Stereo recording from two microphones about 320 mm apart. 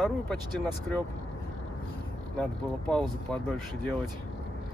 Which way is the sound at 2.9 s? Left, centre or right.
Centre.